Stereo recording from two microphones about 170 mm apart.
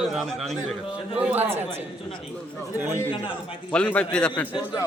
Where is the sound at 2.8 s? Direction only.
10° right (ahead or behind).